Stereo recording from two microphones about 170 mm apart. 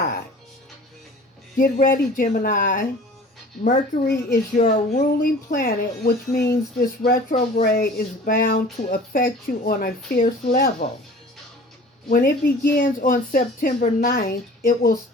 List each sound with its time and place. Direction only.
1.5 s speech: 55° left (ahead or behind)
12.0 s speech: 60° left (ahead or behind)